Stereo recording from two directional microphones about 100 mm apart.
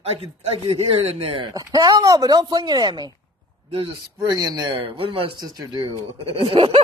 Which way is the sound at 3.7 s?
75° right (ahead or behind).